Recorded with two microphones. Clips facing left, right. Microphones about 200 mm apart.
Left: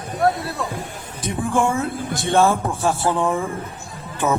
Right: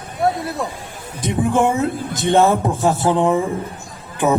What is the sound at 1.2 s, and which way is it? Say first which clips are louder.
A man's voice: right 4 dB; 20° right (ahead or behind).